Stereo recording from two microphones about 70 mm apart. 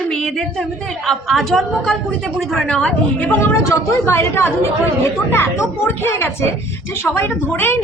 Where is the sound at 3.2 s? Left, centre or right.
Left.